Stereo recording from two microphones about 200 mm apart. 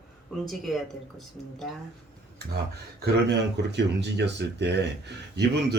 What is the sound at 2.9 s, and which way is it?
Speech, 55° right (ahead or behind).